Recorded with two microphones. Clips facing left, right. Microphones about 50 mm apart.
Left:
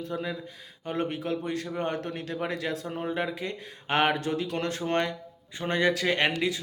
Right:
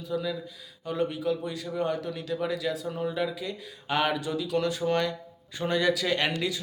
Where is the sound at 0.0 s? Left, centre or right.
Left.